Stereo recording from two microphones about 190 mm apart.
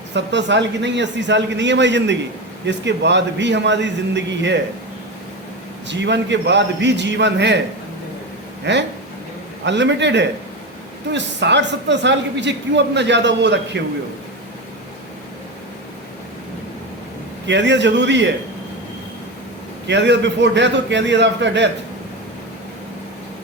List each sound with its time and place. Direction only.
0.1 s speech: 70° right (ahead or behind)
5.9 s speech: 70° right (ahead or behind)
8.7 s speech: 65° right (ahead or behind)
17.4 s speech: 70° right (ahead or behind)
19.9 s speech: 70° right (ahead or behind)